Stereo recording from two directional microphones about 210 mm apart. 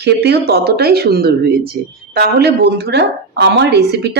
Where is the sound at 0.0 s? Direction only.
50° right (ahead or behind).